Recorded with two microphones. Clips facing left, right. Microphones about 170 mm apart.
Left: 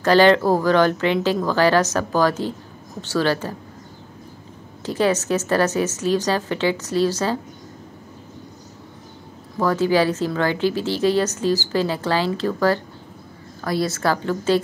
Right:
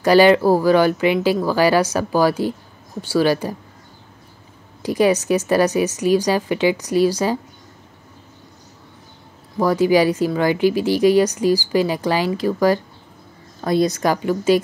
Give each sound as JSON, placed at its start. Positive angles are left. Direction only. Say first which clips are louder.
{"t": 0.0, "sound": "speech", "louder": "right 2 dB", "side_deg": -10}
{"t": 4.8, "sound": "speech", "louder": "right 3 dB", "side_deg": -10}
{"t": 9.6, "sound": "speech", "louder": "right 3 dB", "side_deg": -10}